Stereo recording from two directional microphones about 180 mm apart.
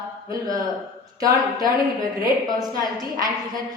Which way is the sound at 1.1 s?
20° right (ahead or behind).